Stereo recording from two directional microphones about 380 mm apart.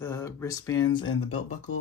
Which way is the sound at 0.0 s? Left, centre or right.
Centre.